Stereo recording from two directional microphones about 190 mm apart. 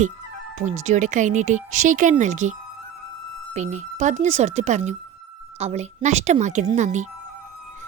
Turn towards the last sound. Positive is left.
turn(degrees=-40)  # may be behind; listen again after turning